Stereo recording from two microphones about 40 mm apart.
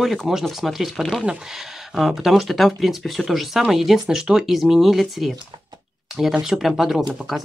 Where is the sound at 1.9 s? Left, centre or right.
Centre.